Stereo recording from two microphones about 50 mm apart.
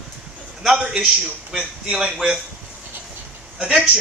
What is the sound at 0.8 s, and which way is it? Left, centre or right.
Speech, right.